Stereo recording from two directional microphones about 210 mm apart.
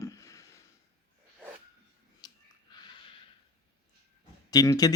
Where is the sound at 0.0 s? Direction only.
15° left (ahead or behind).